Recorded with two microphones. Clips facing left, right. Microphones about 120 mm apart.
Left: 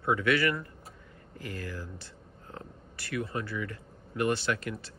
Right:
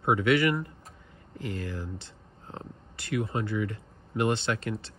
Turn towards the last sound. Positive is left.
turn(degrees=-25)  # may be behind; listen again after turning